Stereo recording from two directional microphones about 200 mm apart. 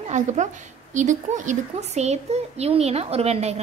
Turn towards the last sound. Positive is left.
turn(degrees=-30)  # may be behind; listen again after turning